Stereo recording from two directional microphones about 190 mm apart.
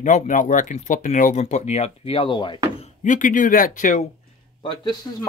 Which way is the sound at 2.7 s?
40° left (ahead or behind).